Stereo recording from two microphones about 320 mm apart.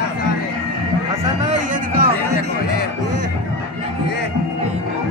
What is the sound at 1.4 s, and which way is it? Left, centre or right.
Music, right.